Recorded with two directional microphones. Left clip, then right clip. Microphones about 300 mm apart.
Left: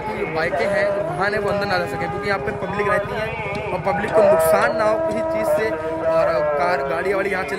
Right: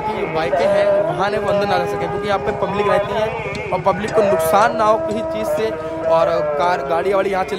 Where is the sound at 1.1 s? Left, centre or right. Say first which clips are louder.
Right 3 dB; centre.